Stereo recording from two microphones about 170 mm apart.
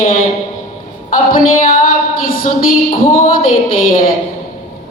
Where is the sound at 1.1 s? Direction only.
55° left (ahead or behind).